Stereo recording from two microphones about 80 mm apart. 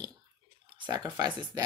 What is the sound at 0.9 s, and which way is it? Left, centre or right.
Speech, right.